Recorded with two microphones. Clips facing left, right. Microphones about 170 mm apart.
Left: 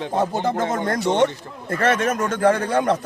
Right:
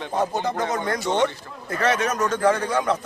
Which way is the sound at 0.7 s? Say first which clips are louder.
Left 3 dB; 55° left (ahead or behind).